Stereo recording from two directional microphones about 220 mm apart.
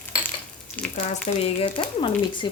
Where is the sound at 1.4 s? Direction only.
25° left (ahead or behind).